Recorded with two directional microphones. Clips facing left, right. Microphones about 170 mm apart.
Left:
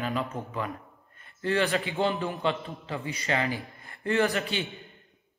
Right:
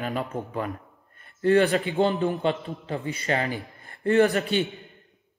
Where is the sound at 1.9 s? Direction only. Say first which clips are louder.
Right 5 dB; 35° right (ahead or behind).